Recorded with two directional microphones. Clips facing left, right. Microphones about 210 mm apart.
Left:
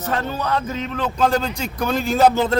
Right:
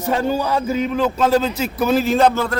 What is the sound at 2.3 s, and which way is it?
Speech, 20° left (ahead or behind).